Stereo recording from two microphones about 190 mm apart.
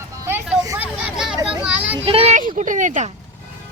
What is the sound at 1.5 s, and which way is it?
Children playing, 5° right (ahead or behind).